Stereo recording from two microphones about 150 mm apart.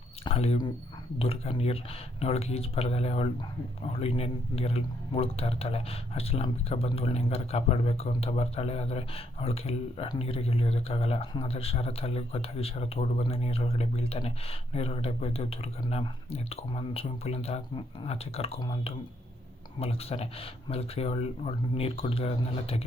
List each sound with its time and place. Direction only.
0.3 s speech: 40° left (ahead or behind)